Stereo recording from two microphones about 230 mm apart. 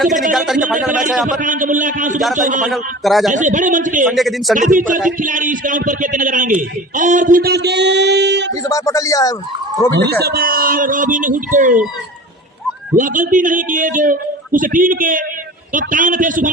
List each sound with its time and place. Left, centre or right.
0.3 s a man's voice: centre
0.9 s a man's voice: right
2.6 s a man's voice: centre
3.3 s a man's voice: right
4.1 s a man's voice: centre
4.5 s a man's voice: right
8.6 s speech: centre
9.9 s a man's voice: right
13.0 s a man's voice: right